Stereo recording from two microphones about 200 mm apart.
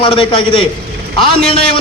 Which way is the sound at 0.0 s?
25° left (ahead or behind).